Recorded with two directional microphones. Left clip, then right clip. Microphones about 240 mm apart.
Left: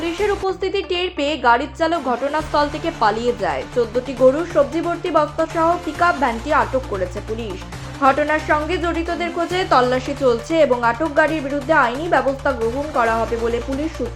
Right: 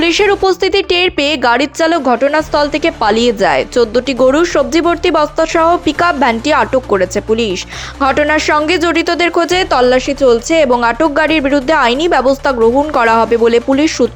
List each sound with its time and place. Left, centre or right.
0.0 s speech: right
8.0 s speech: right